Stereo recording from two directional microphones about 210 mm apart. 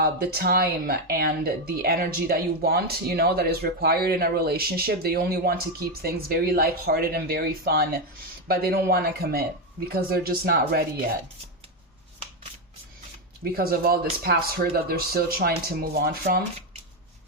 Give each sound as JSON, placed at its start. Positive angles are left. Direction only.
{"t": 0.0, "sound": "speech", "side_deg": -45}
{"t": 13.6, "sound": "speech", "side_deg": -45}